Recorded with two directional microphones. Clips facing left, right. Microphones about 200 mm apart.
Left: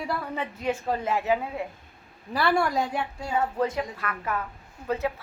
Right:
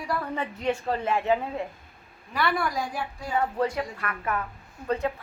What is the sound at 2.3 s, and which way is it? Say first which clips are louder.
A woman's voice: left 3 dB; 30° left (ahead or behind).